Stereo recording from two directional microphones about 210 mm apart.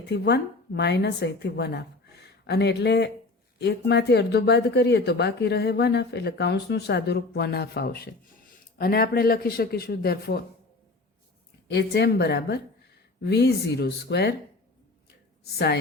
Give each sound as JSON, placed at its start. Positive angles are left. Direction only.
{"t": 0.1, "sound": "speech", "side_deg": 50}
{"t": 11.7, "sound": "speech", "side_deg": 50}
{"t": 15.4, "sound": "speech", "side_deg": 50}